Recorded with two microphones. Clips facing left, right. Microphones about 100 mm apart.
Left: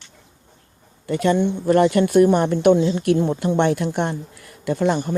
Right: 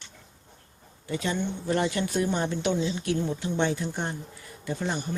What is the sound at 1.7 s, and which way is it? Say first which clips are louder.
Speech: left 11 dB; 55° left (ahead or behind).